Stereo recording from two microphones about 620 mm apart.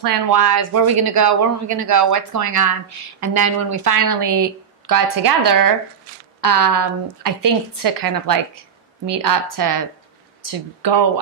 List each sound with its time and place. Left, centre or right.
0.0 s speech: right